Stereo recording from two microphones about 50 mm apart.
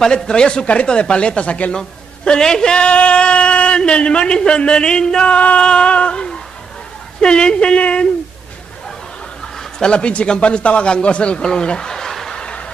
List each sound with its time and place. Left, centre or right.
0.0 s a man's voice: centre
1.8 s a man's voice: centre
9.8 s a man's voice: centre